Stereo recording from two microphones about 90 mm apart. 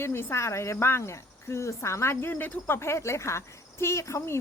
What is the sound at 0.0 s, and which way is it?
Speech, 30° left (ahead or behind).